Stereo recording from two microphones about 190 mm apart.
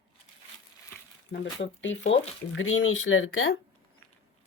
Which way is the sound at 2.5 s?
90° left.